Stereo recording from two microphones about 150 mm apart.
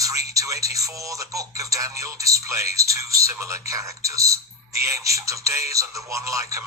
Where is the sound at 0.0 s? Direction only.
20° right (ahead or behind).